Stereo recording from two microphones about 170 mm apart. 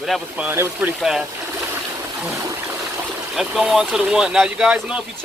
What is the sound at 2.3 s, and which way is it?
Water, 15° right (ahead or behind).